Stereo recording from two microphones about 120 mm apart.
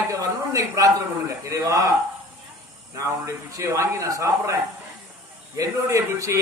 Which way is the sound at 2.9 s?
25° right (ahead or behind).